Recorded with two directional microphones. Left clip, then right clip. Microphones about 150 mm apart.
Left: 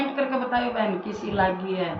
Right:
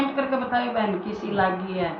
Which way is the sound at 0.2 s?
Centre (ahead or behind).